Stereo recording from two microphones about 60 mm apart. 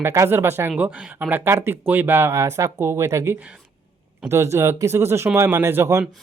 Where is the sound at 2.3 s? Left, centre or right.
Right.